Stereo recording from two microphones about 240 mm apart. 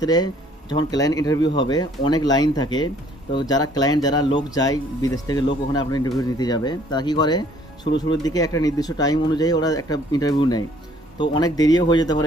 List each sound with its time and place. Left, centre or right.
0.0 s speech: centre